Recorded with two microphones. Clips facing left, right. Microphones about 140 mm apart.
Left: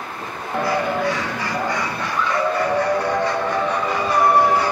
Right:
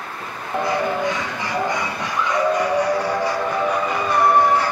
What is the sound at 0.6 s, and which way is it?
Music, 20° right (ahead or behind).